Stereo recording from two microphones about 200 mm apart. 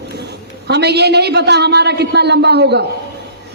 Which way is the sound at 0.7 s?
55° right (ahead or behind).